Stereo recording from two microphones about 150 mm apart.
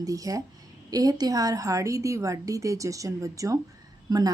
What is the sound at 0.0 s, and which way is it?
A woman's voice, 20° right (ahead or behind).